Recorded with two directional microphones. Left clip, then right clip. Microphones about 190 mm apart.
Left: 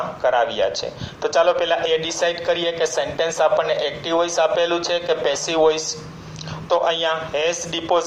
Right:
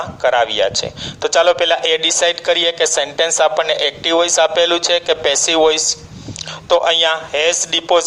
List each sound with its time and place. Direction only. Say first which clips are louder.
0.2 s a man's voice: right 5 dB; 55° right (ahead or behind)